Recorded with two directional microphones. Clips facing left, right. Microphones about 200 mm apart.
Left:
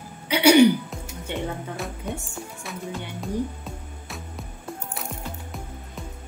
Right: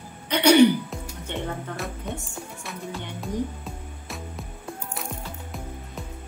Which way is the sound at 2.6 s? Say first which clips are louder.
Left 2 dB; centre (ahead or behind).